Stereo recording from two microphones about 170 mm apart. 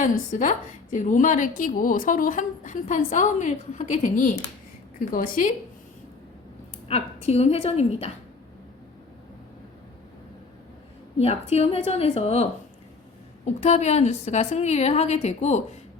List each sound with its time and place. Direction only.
0.0 s a woman's voice: 50° left (ahead or behind)
6.8 s a woman's voice: 35° left (ahead or behind)
11.2 s a woman's voice: 40° left (ahead or behind)